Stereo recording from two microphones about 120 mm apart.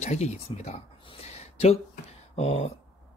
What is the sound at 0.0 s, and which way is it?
Speech, 65° left (ahead or behind).